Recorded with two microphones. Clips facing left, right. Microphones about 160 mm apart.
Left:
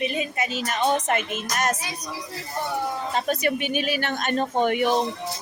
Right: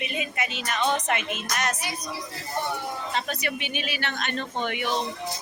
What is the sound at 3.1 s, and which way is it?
Speech, 45° left (ahead or behind).